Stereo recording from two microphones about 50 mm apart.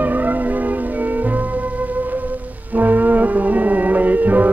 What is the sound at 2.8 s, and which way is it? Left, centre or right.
Music, right.